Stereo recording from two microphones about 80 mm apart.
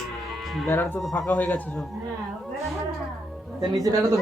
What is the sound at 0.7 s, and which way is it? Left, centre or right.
Speech, left.